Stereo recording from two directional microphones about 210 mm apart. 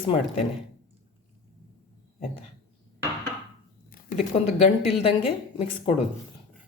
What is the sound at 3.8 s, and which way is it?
A woman's voice, 40° left (ahead or behind).